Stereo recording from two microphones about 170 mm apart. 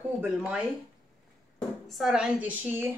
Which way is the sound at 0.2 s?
5° right (ahead or behind).